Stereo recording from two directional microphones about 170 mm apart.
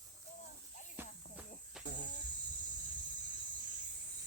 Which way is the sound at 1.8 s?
5° right (ahead or behind).